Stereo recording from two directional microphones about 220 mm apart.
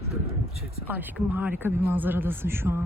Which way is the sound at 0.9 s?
10° right (ahead or behind).